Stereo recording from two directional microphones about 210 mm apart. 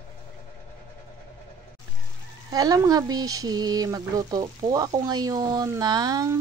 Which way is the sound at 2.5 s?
15° right (ahead or behind).